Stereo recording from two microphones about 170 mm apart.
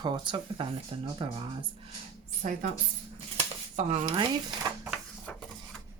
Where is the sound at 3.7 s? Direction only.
40° right (ahead or behind).